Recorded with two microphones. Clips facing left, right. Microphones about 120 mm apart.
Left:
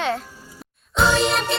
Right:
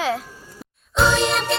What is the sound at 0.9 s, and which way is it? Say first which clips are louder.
Music: even; centre (ahead or behind).